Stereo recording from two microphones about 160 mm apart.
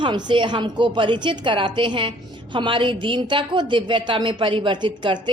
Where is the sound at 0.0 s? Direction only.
30° right (ahead or behind).